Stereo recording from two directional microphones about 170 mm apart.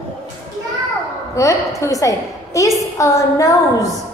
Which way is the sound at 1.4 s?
20° left (ahead or behind).